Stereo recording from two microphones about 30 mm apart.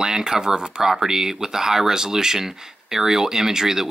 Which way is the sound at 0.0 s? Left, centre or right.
Right.